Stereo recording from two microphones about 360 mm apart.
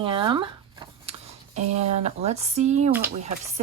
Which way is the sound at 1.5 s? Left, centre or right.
Centre.